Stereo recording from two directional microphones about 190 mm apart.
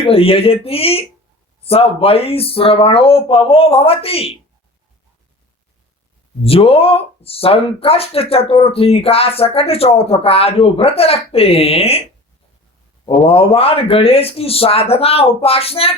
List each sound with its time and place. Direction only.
0.0 s speech: 30° left (ahead or behind)
6.4 s speech: 30° left (ahead or behind)
13.1 s speech: 30° left (ahead or behind)